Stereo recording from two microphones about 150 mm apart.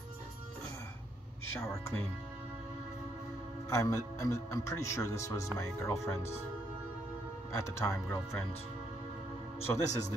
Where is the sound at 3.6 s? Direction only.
20° left (ahead or behind).